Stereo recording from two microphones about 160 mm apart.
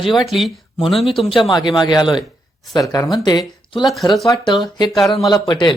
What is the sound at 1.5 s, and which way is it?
Speech, 30° left (ahead or behind).